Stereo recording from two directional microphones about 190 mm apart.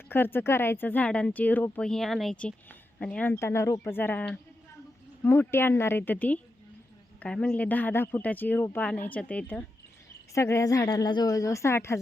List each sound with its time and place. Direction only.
0.1 s speech: 10° left (ahead or behind)